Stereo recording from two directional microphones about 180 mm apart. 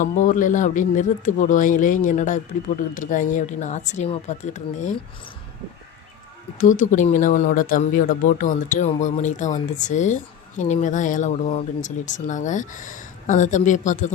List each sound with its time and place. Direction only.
0.0 s speech: 45° left (ahead or behind)
6.6 s speech: 45° left (ahead or behind)